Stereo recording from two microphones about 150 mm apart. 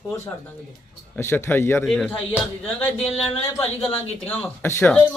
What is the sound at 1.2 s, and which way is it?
A man's voice, 15° left (ahead or behind).